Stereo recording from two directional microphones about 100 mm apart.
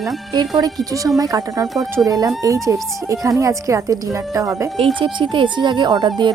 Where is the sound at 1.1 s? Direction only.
35° right (ahead or behind).